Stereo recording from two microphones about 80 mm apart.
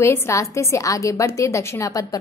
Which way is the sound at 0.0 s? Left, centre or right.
Left.